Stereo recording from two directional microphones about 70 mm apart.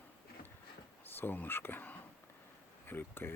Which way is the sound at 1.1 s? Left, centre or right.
Left.